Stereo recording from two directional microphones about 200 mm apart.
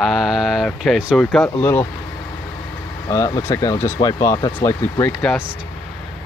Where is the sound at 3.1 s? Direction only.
15° left (ahead or behind).